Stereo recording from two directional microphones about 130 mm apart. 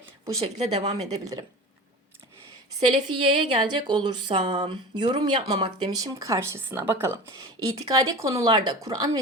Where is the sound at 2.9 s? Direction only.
40° right (ahead or behind); by 7.1 s 20° right (ahead or behind).